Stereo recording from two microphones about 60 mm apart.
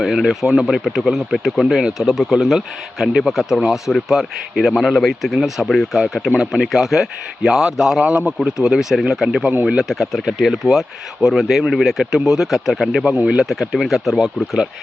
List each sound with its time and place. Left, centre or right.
0.0 s speech: centre
2.6 s speech: centre
8.0 s speech: right
8.4 s speech: centre
13.2 s speech: centre